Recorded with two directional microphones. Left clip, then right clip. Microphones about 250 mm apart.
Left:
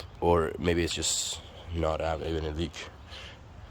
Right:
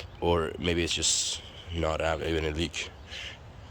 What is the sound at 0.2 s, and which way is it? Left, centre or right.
Speech, centre.